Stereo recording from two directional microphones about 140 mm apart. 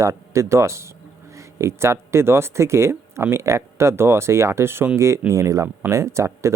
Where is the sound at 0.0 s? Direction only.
20° right (ahead or behind).